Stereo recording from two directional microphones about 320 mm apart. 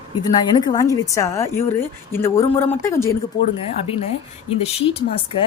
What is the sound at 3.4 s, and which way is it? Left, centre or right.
A woman's voice, centre.